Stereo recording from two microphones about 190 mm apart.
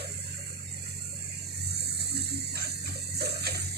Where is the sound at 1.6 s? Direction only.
60° right (ahead or behind).